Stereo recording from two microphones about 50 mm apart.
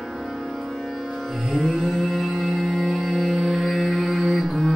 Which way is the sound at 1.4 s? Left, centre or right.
Centre.